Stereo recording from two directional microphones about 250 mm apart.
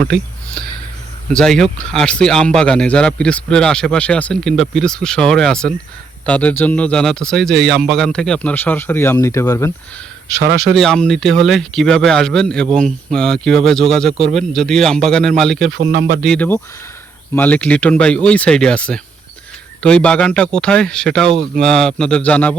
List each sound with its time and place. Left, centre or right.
1.3 s speech: centre
10.8 s speech: centre
15.7 s speech: right
16.2 s speech: centre